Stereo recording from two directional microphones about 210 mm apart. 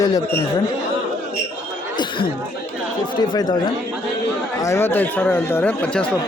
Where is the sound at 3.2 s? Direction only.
20° left (ahead or behind).